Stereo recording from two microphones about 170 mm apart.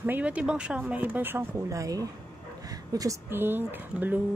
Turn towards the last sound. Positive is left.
turn(degrees=-10)  # may be behind; listen again after turning